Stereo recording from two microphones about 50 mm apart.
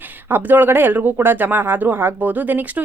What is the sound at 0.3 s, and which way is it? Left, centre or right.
Speech, right.